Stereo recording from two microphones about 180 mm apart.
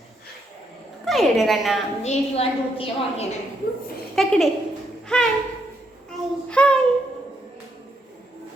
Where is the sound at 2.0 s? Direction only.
35° left (ahead or behind).